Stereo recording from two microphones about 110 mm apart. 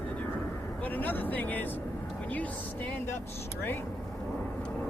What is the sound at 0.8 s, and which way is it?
Speech, 15° left (ahead or behind).